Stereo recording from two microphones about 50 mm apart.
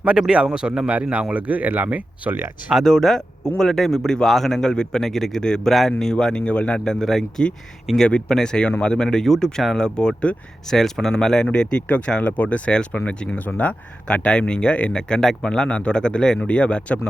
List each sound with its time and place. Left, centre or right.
0.0 s speech: centre
2.8 s speech: centre
6.4 s speech: left
6.8 s speech: centre
10.7 s speech: centre
11.9 s speech: left
14.3 s speech: centre